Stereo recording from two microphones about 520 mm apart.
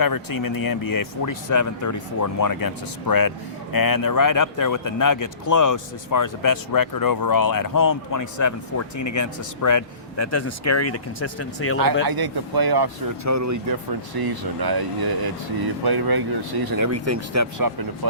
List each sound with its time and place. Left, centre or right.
0.0 s speech: left
12.0 s speech: right
13.2 s speech: right
14.2 s speech: right